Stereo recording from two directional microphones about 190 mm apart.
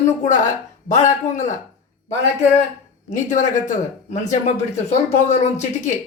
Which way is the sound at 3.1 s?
40° left (ahead or behind).